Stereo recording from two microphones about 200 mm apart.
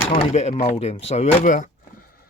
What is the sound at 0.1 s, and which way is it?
Speech, 30° left (ahead or behind).